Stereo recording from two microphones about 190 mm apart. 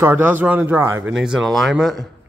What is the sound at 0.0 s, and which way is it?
Speech, 10° right (ahead or behind).